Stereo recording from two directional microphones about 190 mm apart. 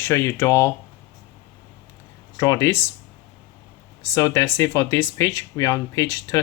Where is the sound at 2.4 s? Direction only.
15° left (ahead or behind).